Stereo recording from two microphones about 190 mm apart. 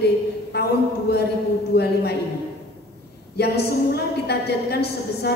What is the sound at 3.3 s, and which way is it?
A woman's voice, 60° left (ahead or behind).